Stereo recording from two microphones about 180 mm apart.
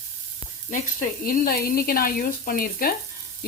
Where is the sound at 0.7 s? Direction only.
50° left (ahead or behind).